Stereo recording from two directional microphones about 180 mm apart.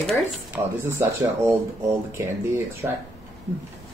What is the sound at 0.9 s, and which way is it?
Speech, 15° right (ahead or behind).